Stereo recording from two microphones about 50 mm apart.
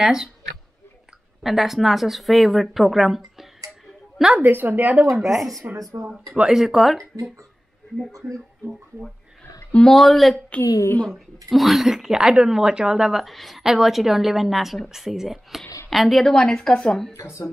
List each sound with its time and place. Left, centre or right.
0.0 s speech: centre
1.4 s speech: centre
4.4 s a woman's voice: right
5.1 s speech: centre
5.9 s speech: right
6.3 s speech: centre
6.6 s speech: centre
9.4 s a sound: left
9.8 s speech: centre
10.5 s a woman's voice: left
11.1 s a woman's voice: centre
17.1 s speech: left